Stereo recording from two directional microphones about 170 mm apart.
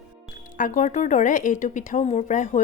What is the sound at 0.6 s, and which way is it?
A woman's voice, 50° left (ahead or behind).